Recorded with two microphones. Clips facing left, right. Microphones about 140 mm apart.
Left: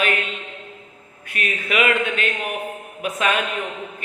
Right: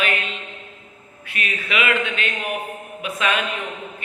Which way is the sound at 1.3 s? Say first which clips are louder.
Left 2 dB; 45° left (ahead or behind).